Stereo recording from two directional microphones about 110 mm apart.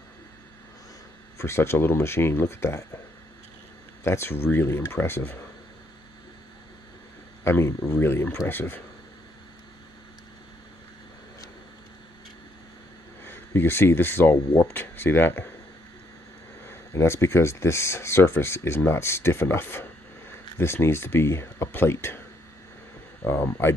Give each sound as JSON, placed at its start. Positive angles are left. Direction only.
{"t": 1.4, "sound": "speech", "side_deg": 25}
{"t": 4.0, "sound": "speech", "side_deg": 25}
{"t": 7.4, "sound": "speech", "side_deg": 20}
{"t": 13.2, "sound": "speech", "side_deg": 20}
{"t": 16.6, "sound": "speech", "side_deg": 25}
{"t": 23.2, "sound": "speech", "side_deg": 20}